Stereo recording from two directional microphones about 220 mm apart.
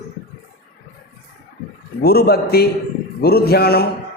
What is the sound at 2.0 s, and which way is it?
Speech, 45° left (ahead or behind).